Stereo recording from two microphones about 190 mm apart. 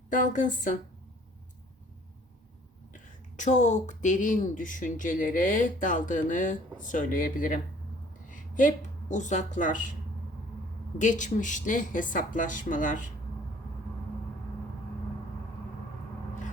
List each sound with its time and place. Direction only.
0.1 s a woman's voice: 40° left (ahead or behind)
2.9 s a woman's voice: 40° left (ahead or behind)
10.9 s a woman's voice: 40° left (ahead or behind)